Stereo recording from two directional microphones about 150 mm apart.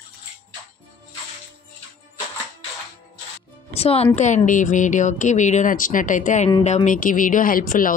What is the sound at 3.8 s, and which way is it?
Speech, 45° left (ahead or behind).